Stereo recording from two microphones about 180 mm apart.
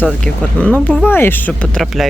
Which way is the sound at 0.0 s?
5° left (ahead or behind).